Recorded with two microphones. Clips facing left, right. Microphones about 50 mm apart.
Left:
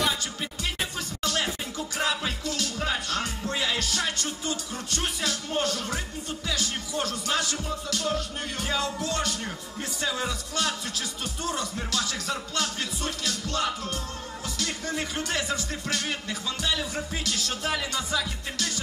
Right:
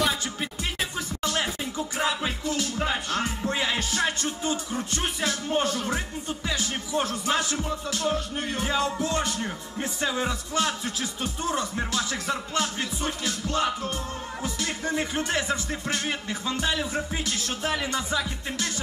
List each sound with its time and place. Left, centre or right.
0.9 s music: right